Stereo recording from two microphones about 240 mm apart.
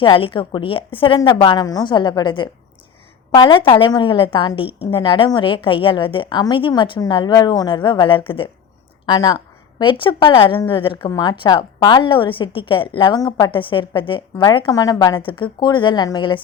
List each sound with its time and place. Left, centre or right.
0.0 s a woman's voice: left